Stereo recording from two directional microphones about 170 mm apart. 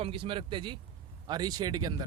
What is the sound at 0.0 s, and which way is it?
A man's voice, 30° right (ahead or behind).